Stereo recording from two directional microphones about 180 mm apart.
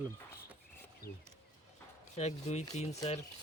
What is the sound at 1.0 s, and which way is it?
Speech, 55° left (ahead or behind).